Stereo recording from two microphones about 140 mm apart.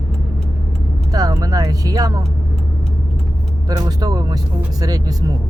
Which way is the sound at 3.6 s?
25° right (ahead or behind).